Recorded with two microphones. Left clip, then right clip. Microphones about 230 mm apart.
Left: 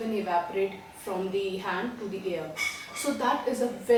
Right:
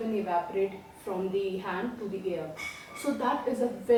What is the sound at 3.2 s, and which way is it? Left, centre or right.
Speech, centre.